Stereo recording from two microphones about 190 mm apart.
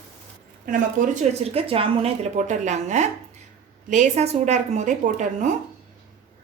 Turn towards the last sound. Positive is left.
turn(degrees=-40)  # may be behind; listen again after turning